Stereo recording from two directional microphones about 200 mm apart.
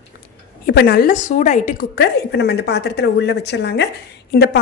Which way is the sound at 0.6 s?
55° left (ahead or behind).